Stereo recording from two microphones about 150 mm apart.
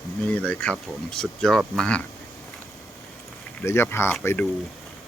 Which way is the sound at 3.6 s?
15° left (ahead or behind).